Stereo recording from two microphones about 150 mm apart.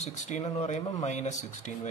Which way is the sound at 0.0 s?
50° left (ahead or behind).